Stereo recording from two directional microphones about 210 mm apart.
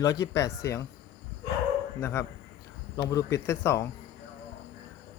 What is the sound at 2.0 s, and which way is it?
A man's voice, 10° left (ahead or behind).